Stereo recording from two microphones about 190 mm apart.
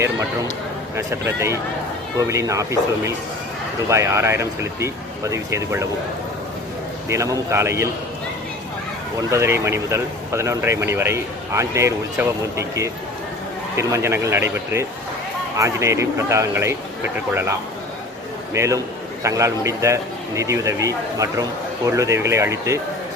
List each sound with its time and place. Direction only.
0.9 s speech: 15° right (ahead or behind)
7.1 s speech: 15° right (ahead or behind)
9.3 s speech: 15° right (ahead or behind)
18.5 s speech: 15° right (ahead or behind)